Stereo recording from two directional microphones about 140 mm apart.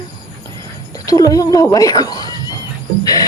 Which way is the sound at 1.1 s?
25° left (ahead or behind).